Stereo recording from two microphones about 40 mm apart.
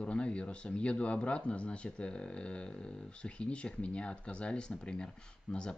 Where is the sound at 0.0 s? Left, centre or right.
Left.